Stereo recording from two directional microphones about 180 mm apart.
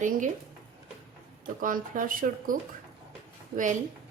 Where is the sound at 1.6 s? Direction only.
50° right (ahead or behind).